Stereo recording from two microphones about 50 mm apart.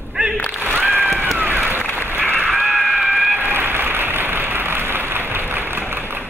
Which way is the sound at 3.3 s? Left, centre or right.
Right.